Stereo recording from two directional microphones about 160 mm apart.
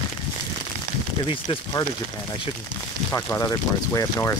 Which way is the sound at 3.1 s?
20° left (ahead or behind).